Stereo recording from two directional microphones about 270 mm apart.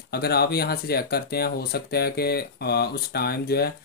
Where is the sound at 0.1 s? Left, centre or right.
Left.